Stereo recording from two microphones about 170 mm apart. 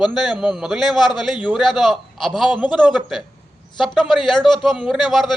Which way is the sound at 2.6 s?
25° left (ahead or behind).